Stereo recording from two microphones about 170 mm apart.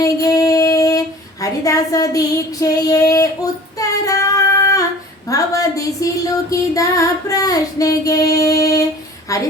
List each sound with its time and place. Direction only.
0.0 s female singing: 20° left (ahead or behind)
5.3 s music: 20° left (ahead or behind)